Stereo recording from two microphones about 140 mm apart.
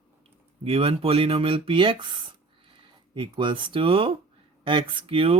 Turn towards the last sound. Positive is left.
turn(degrees=-40)  # may be behind; listen again after turning